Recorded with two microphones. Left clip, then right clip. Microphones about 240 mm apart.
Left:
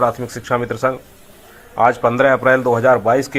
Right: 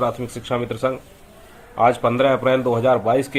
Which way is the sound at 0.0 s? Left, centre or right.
Centre.